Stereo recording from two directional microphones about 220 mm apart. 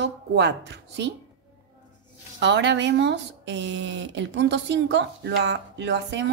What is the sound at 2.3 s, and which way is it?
Speech, 50° right (ahead or behind).